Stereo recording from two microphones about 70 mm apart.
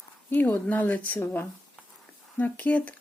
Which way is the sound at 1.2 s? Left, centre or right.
Left.